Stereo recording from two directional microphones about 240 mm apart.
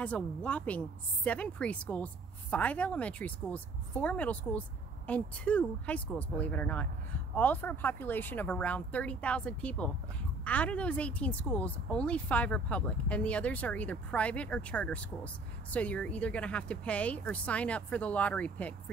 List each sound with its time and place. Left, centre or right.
0.0 s speech: centre